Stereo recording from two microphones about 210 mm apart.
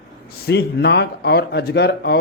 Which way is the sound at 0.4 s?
55° left (ahead or behind).